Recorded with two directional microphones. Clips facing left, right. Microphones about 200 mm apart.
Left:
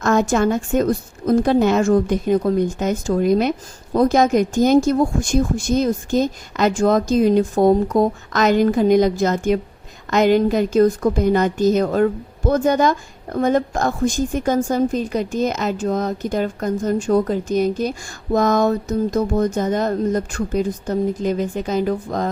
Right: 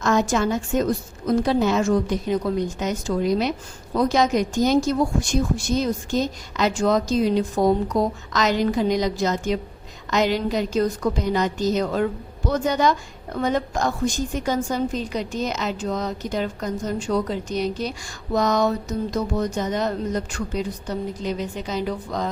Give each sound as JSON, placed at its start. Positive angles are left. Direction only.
{"t": 0.0, "sound": "a woman's voice", "side_deg": 50}